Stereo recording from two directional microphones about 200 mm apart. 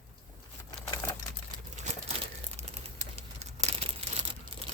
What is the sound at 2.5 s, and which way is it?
Crumpling, 30° right (ahead or behind).